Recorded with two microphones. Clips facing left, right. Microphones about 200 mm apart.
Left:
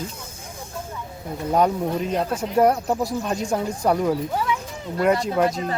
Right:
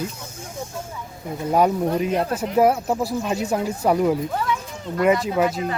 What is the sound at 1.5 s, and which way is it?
Speech, 10° right (ahead or behind).